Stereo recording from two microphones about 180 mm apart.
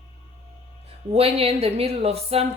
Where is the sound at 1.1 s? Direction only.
35° right (ahead or behind).